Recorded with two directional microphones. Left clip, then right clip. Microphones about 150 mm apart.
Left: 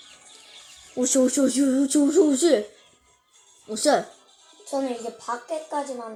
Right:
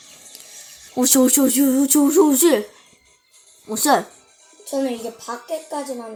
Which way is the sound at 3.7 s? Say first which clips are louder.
Right 3 dB; 30° right (ahead or behind).